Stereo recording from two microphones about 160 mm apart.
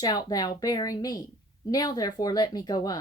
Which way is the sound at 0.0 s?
25° left (ahead or behind).